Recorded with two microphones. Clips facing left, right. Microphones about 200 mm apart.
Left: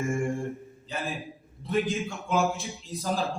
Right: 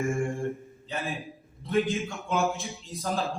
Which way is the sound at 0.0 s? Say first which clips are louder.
Even; centre (ahead or behind).